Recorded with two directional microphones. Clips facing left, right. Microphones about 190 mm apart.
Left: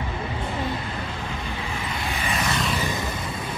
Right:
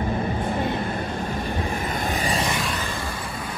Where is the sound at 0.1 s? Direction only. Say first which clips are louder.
Right 5 dB; 50° right (ahead or behind).